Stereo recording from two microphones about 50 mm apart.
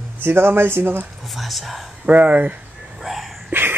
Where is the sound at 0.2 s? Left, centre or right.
Right.